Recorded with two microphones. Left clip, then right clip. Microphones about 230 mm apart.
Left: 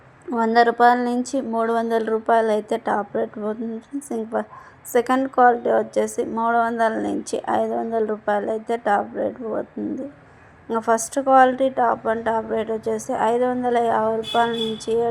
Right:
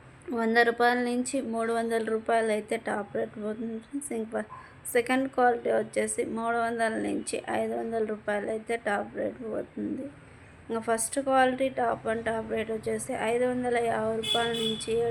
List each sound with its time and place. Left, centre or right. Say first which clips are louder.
0.3 s a woman's voice: left 7 dB; centre
4.9 s a woman's voice: left 8 dB; centre